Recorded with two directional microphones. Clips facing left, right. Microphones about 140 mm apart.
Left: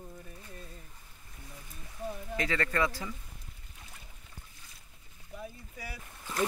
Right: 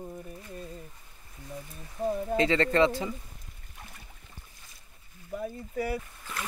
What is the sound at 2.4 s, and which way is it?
Speech, 25° right (ahead or behind).